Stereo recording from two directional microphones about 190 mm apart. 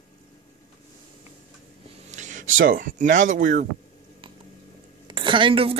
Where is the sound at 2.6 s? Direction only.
50° right (ahead or behind).